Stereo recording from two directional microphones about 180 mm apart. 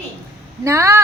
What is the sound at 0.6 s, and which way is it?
Speech, 15° right (ahead or behind).